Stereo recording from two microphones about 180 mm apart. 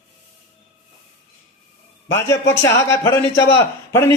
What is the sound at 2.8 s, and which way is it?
A man's voice, 15° left (ahead or behind).